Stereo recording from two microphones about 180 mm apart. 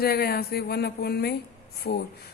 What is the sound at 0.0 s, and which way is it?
A woman's voice, 60° left (ahead or behind).